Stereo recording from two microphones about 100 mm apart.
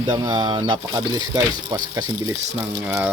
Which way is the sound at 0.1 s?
40° right (ahead or behind).